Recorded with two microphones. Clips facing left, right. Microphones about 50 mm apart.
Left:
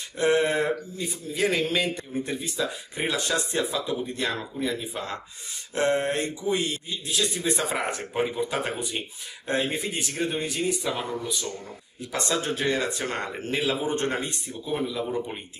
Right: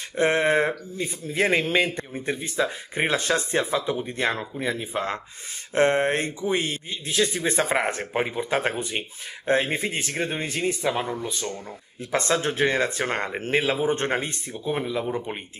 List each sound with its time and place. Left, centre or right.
0.1 s speech: right
8.3 s speech: right